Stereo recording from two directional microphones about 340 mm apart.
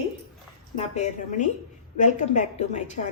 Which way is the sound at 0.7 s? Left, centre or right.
Centre.